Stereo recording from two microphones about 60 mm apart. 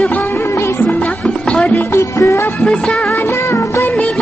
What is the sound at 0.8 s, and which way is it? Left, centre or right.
Music, left.